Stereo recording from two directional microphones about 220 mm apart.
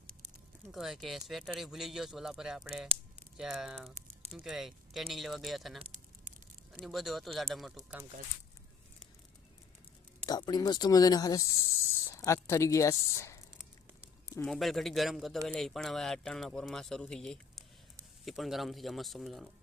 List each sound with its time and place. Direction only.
0.7 s speech: centre (ahead or behind)
6.8 s speech: centre (ahead or behind)
10.2 s speech: 20° left (ahead or behind)
14.3 s speech: centre (ahead or behind)